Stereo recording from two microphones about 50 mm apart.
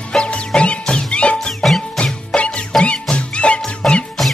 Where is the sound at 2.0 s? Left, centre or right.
Centre.